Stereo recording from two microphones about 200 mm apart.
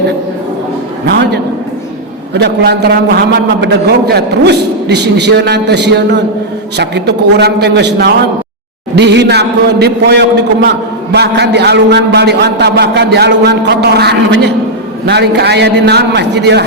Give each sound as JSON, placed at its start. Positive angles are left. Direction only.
{"t": 1.0, "sound": "a man's voice", "side_deg": -55}